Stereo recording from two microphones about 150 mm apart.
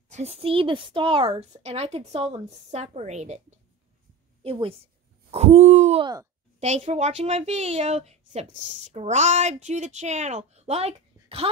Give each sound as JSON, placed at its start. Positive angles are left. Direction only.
{"t": 0.1, "sound": "a woman's voice", "side_deg": -45}
{"t": 4.4, "sound": "a woman's voice", "side_deg": -40}
{"t": 5.3, "sound": "a woman's voice", "side_deg": -50}